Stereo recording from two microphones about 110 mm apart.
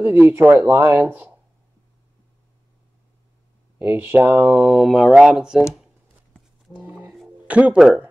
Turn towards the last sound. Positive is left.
turn(degrees=-10)  # may be behind; listen again after turning